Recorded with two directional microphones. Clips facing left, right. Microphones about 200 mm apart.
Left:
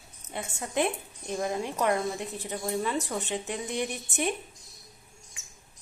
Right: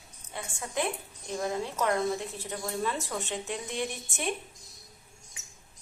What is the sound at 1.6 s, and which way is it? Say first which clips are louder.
A woman's voice: even; 15° left (ahead or behind).